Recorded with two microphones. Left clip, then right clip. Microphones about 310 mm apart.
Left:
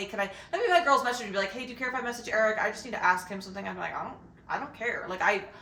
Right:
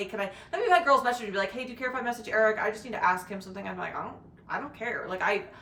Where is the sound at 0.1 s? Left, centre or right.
Centre.